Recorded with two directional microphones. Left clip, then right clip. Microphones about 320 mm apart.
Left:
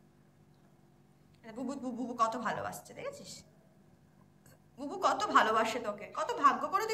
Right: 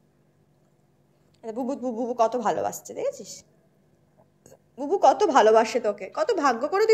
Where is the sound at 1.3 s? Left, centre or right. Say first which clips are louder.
Right 11 dB; centre.